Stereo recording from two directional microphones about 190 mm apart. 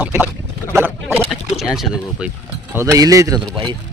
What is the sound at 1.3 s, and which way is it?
Speech, centre (ahead or behind).